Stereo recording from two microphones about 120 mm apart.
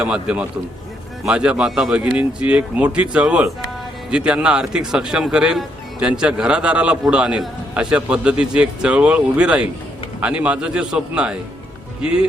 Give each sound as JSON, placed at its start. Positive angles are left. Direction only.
{"t": 0.0, "sound": "speech", "side_deg": -10}